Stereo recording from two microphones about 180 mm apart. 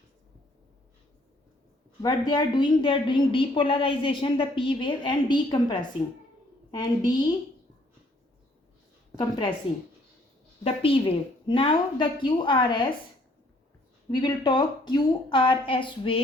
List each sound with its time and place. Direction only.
2.0 s a woman's voice: 25° left (ahead or behind)
9.1 s a woman's voice: 25° left (ahead or behind)
10.6 s a woman's voice: 30° left (ahead or behind)
14.1 s a woman's voice: 25° left (ahead or behind)